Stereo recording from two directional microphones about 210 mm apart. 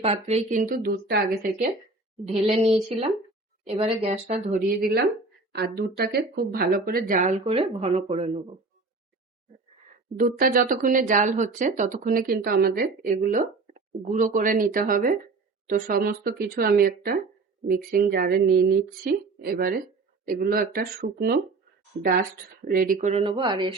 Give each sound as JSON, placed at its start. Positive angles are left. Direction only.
{"t": 0.0, "sound": "speech", "side_deg": -30}
{"t": 2.2, "sound": "a woman's voice", "side_deg": -30}
{"t": 4.8, "sound": "a woman's voice", "side_deg": -50}
{"t": 10.2, "sound": "a woman's voice", "side_deg": -45}
{"t": 22.6, "sound": "speech", "side_deg": -40}